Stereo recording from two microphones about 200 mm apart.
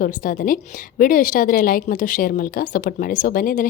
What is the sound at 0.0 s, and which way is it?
A woman's voice, 45° left (ahead or behind).